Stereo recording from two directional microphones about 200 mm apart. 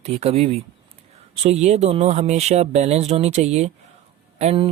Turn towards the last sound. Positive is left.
turn(degrees=-30)  # may be behind; listen again after turning